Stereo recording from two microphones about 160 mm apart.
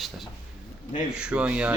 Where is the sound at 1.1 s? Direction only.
5° right (ahead or behind).